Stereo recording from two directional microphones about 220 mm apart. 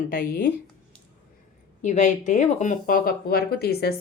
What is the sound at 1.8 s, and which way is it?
Speech, 35° left (ahead or behind).